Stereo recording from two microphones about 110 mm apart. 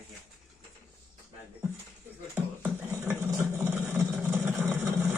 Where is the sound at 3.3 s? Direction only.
25° right (ahead or behind).